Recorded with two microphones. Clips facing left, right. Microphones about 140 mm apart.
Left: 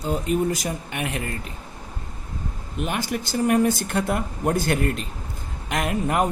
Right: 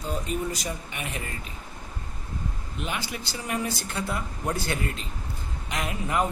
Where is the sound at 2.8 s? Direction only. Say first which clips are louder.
Left 7 dB; 45° left (ahead or behind).